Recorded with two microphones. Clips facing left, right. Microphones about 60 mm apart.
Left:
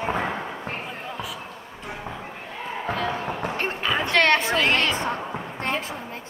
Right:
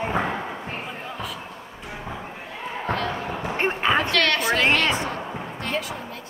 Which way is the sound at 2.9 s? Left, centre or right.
Centre.